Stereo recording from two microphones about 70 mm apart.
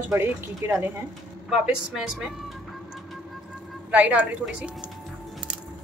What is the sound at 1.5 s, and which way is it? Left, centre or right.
Speech, centre.